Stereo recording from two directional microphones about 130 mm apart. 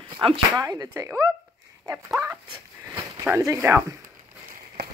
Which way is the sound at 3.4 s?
20° right (ahead or behind).